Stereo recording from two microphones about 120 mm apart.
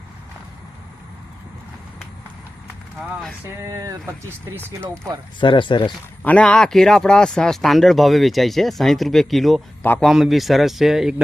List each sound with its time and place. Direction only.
3.6 s speech: 30° right (ahead or behind)
5.4 s speech: 40° left (ahead or behind)
6.2 s speech: 10° left (ahead or behind)